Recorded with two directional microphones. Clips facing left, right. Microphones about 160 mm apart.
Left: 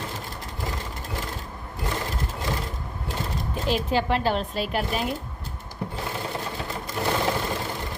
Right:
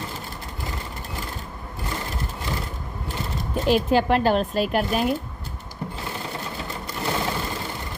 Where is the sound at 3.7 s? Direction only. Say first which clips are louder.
Right 5 dB; 50° right (ahead or behind).